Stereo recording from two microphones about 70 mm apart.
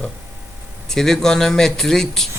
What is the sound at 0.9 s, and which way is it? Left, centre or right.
A man's voice, centre.